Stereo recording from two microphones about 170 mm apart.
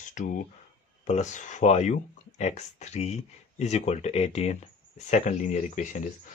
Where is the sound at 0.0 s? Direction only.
50° left (ahead or behind).